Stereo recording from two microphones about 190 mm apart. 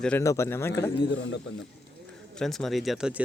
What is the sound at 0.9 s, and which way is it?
Speech, 70° left (ahead or behind).